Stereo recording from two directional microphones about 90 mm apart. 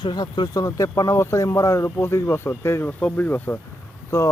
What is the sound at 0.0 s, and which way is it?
Speech, 55° left (ahead or behind).